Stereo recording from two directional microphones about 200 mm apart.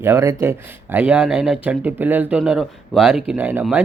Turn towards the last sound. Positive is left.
turn(degrees=-5)  # may be behind; listen again after turning